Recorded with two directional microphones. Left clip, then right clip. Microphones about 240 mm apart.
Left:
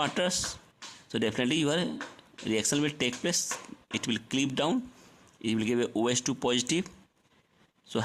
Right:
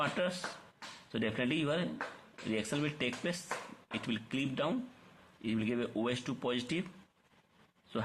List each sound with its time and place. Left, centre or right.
0.0 s speech: left